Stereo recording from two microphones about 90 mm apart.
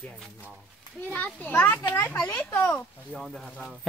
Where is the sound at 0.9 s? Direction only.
15° left (ahead or behind).